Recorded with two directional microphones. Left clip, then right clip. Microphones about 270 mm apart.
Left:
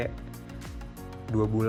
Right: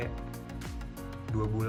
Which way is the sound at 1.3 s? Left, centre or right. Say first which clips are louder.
Left 7 dB; left.